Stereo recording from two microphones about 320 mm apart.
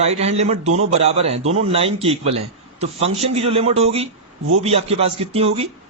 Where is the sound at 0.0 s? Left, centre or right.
Centre.